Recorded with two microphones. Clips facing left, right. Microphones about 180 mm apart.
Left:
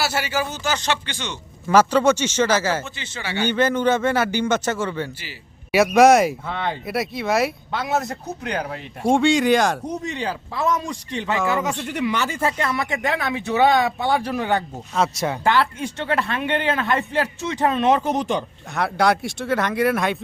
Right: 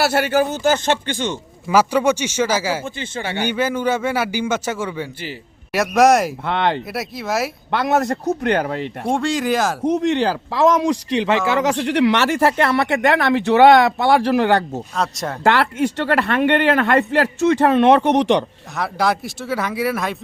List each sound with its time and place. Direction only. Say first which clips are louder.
0.0 s speech: right 7 dB; 55° right (ahead or behind)
1.6 s a man's voice: even; 10° right (ahead or behind)
2.8 s speech: right 6 dB; 50° right (ahead or behind)
3.4 s a man's voice: left 2 dB; 10° right (ahead or behind)
5.7 s speech: left 1 dB; centre (ahead or behind)
6.4 s speech: right 7 dB; 75° right (ahead or behind)
6.8 s speech: left 2 dB; centre (ahead or behind)
7.7 s speech: right 6 dB; 70° right (ahead or behind)
9.0 s speech: left 4 dB; centre (ahead or behind)
9.8 s speech: right 9 dB; 90° right
14.9 s speech: left 3 dB; centre (ahead or behind)
15.4 s speech: right 5 dB; 80° right
18.8 s speech: left 1 dB; centre (ahead or behind)